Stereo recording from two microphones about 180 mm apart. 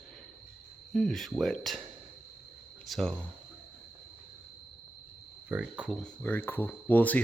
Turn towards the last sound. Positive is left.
turn(degrees=10)  # may be behind; listen again after turning